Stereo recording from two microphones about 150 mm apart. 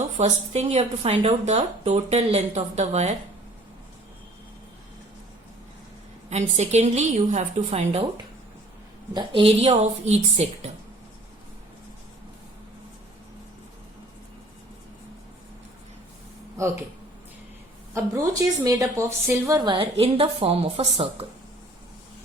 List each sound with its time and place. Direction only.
0.0 s a woman's voice: 45° right (ahead or behind)
6.3 s a woman's voice: 50° right (ahead or behind)
9.1 s a woman's voice: 35° right (ahead or behind)
16.6 s speech: 20° right (ahead or behind)
17.9 s a woman's voice: 20° right (ahead or behind); by 21.2 s 40° right (ahead or behind)